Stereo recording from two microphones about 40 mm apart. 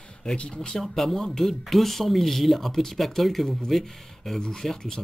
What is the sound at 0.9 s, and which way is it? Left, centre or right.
Speech, centre.